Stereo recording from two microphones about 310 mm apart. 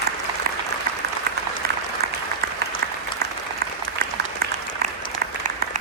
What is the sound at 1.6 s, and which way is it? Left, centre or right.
Applause, right.